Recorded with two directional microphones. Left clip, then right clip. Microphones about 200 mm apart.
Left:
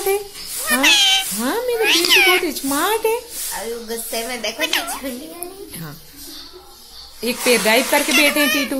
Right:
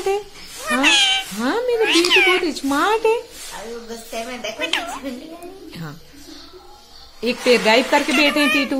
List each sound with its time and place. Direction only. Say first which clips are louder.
0.7 s cat: left 1 dB; 5° right (ahead or behind)
4.1 s speech: left 2 dB; 40° left (ahead or behind)
4.6 s speech: left 1 dB; centre (ahead or behind)
7.2 s speech: right 1 dB; 5° right (ahead or behind)